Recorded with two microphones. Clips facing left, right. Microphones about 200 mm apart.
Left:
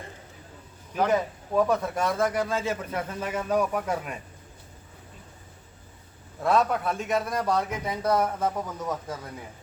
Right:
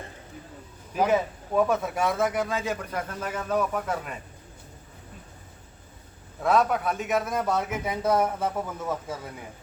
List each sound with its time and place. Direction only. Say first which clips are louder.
0.9 s speech: right 1 dB; 5° right (ahead or behind)
6.4 s speech: right 1 dB; centre (ahead or behind)